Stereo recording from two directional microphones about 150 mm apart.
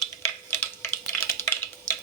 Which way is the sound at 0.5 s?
15° left (ahead or behind).